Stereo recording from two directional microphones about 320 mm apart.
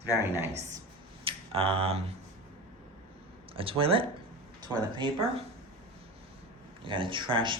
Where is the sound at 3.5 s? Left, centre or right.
Centre.